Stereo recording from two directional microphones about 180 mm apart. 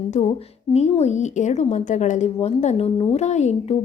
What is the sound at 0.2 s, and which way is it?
A woman's voice, 30° left (ahead or behind).